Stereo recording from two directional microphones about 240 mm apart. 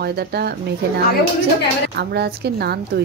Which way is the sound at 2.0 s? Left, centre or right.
Right.